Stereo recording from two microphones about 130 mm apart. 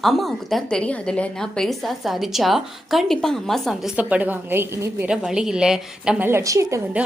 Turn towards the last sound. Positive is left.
turn(degrees=-10)  # may be behind; listen again after turning